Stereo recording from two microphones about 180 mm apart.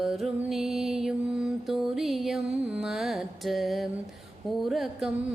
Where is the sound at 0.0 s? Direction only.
Centre (ahead or behind).